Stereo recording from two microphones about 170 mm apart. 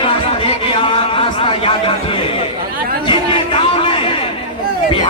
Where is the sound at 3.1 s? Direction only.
30° left (ahead or behind).